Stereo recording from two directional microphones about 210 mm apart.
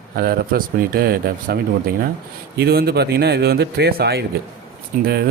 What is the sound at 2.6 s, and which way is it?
Speech, 45° right (ahead or behind).